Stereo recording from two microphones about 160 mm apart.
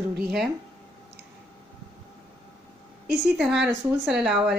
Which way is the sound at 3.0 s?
90° right.